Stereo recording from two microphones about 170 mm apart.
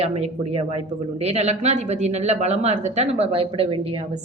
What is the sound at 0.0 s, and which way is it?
A woman's voice, 40° right (ahead or behind).